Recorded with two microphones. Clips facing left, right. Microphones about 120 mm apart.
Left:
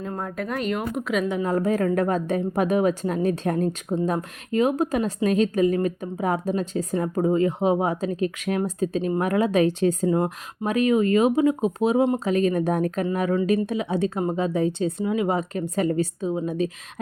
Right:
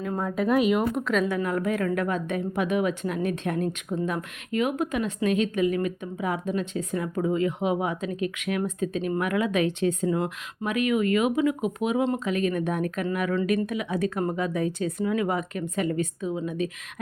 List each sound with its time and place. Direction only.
0.1 s speech: centre (ahead or behind)
1.5 s a woman's voice: 35° left (ahead or behind)
15.4 s a woman's voice: 35° left (ahead or behind)